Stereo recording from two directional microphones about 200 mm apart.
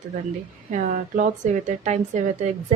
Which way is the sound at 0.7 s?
40° right (ahead or behind).